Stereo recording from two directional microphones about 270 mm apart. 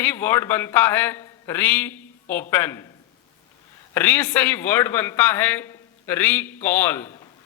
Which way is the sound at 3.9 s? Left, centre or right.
Centre.